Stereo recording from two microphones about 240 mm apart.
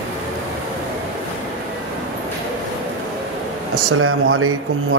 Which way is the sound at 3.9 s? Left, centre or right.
Right.